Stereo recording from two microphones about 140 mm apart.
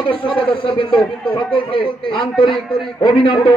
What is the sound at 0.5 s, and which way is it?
A man's voice, 40° left (ahead or behind).